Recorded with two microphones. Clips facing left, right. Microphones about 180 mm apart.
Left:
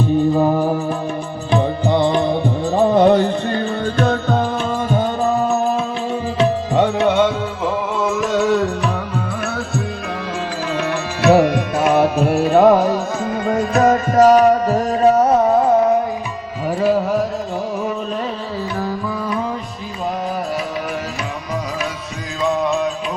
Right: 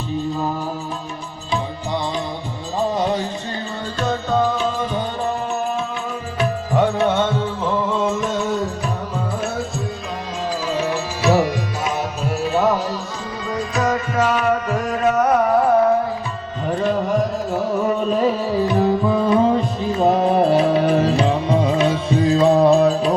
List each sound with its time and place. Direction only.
0.3 s music: 55° left (ahead or behind)
6.4 s music: 20° left (ahead or behind)
8.1 s music: 75° left (ahead or behind)
10.7 s music: 60° left (ahead or behind); by 16.0 s 20° left (ahead or behind)
16.8 s music: 5° left (ahead or behind)
18.7 s music: 20° right (ahead or behind)